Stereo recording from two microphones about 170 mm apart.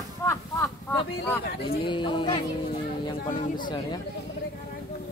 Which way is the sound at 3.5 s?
25° left (ahead or behind).